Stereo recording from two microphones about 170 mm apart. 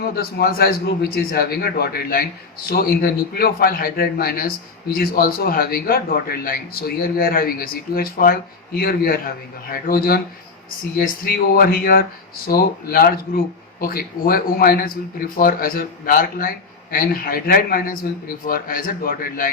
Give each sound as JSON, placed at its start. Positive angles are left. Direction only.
{"t": 0.0, "sound": "a man's voice", "side_deg": 65}
{"t": 11.5, "sound": "a man's voice", "side_deg": 65}